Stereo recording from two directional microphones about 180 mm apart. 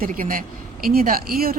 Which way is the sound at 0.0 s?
50° right (ahead or behind).